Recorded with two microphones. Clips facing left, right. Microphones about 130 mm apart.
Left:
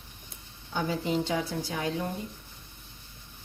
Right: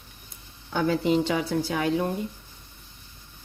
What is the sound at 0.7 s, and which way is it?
A woman's voice, 70° right (ahead or behind).